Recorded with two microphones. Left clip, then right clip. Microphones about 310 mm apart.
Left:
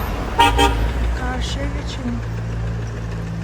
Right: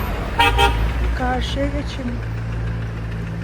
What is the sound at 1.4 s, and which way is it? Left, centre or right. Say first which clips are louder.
Speech: right 3 dB; centre.